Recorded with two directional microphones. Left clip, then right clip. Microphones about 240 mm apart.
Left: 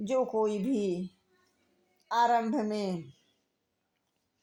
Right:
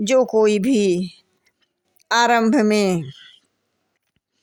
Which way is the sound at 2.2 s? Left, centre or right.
Right.